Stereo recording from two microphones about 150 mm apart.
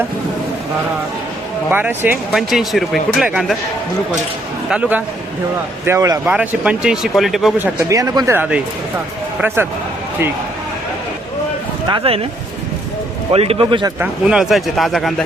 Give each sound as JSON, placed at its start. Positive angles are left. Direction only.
{"t": 1.7, "sound": "speech", "side_deg": -15}
{"t": 2.3, "sound": "speech", "side_deg": 0}
{"t": 4.7, "sound": "speech", "side_deg": -10}
{"t": 6.2, "sound": "speech", "side_deg": -10}
{"t": 7.6, "sound": "speech", "side_deg": -20}
{"t": 8.4, "sound": "speech", "side_deg": -10}
{"t": 11.9, "sound": "a man's voice", "side_deg": -35}
{"t": 13.3, "sound": "a man's voice", "side_deg": -40}
{"t": 14.0, "sound": "speech", "side_deg": -5}